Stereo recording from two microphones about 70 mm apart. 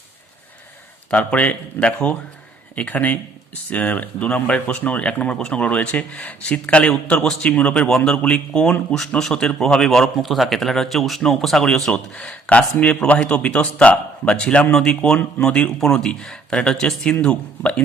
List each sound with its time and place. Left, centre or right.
1.1 s a man's voice: centre